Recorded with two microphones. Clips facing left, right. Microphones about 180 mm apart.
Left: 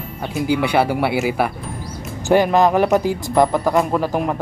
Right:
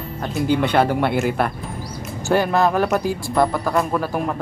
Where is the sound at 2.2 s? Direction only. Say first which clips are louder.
Left 3 dB; 15° left (ahead or behind).